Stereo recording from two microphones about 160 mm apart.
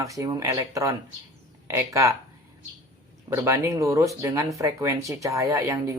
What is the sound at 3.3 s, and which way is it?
Speech, 20° right (ahead or behind).